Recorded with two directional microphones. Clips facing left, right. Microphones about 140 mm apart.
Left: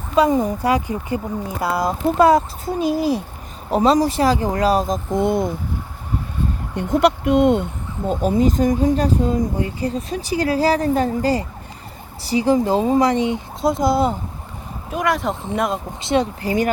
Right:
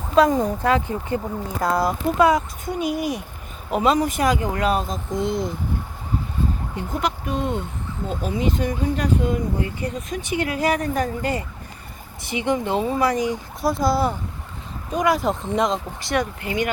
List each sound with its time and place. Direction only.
0.1 s speech: 5° left (ahead or behind)
2.1 s speech: 35° left (ahead or behind)
5.1 s speech: 55° left (ahead or behind)
6.7 s speech: 75° left (ahead or behind)
8.1 s speech: 40° left (ahead or behind); by 14.2 s 20° left (ahead or behind)
14.8 s speech: centre (ahead or behind)
16.0 s speech: 25° left (ahead or behind)